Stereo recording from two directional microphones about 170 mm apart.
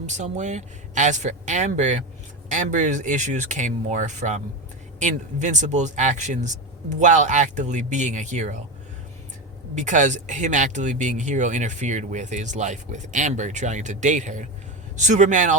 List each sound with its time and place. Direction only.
0.0 s speech: 45° right (ahead or behind)
9.7 s speech: 45° right (ahead or behind)